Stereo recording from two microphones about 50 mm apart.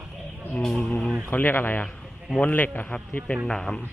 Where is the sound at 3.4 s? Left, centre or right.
Centre.